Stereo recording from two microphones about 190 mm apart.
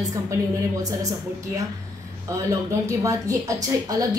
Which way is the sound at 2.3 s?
15° right (ahead or behind).